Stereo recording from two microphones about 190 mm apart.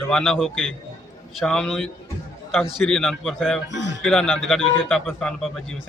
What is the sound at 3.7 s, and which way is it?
Speech, 70° left (ahead or behind).